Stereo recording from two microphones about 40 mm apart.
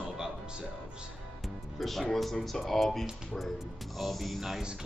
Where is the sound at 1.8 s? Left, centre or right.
Centre.